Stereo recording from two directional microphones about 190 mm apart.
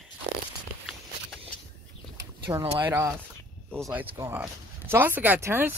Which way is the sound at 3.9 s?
10° right (ahead or behind).